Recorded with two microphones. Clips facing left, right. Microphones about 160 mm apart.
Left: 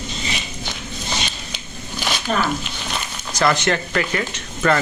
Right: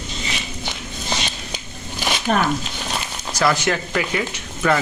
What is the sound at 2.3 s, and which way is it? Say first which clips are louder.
Speech: right 2 dB; 55° right (ahead or behind).